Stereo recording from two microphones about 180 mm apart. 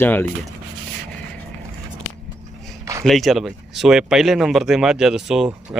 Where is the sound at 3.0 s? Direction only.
Centre (ahead or behind).